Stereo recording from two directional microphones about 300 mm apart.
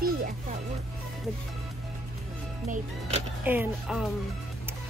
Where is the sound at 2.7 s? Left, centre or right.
Right.